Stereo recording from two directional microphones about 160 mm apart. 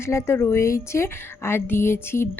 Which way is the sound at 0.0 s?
15° left (ahead or behind).